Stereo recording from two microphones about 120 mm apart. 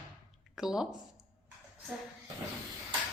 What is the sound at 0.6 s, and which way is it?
Speech, 5° right (ahead or behind).